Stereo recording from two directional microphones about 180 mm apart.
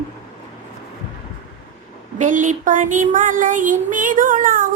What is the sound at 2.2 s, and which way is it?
Speech, 45° right (ahead or behind).